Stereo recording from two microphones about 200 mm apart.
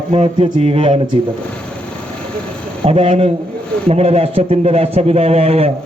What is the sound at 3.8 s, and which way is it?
A man's voice, 30° right (ahead or behind).